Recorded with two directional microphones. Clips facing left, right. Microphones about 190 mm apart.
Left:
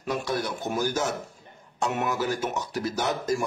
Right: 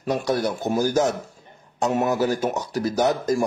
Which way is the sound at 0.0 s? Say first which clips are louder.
Right 6 dB; 35° right (ahead or behind).